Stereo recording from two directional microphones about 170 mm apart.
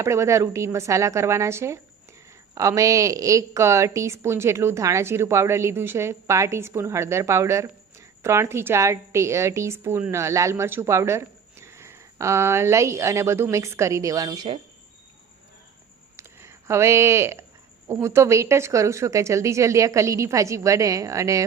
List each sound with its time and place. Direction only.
0.0 s a woman's voice: 15° right (ahead or behind)
16.1 s a sound: 15° right (ahead or behind)
17.8 s a woman's voice: 15° right (ahead or behind)